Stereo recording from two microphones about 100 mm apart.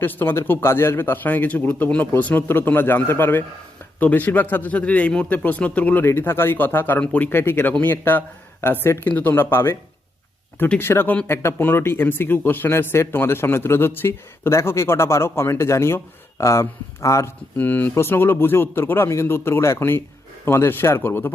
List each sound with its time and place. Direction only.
0.0 s speech: 20° left (ahead or behind)
17.6 s speech: 15° left (ahead or behind)